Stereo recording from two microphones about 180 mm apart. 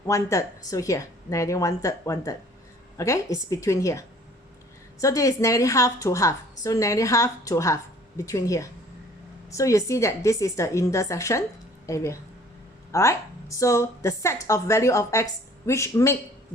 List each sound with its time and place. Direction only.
0.1 s a woman's voice: 15° left (ahead or behind)